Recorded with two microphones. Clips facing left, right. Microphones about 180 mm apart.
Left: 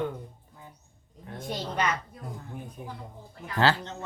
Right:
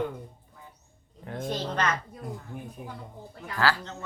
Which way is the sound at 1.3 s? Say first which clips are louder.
Right 5 dB; 70° right (ahead or behind).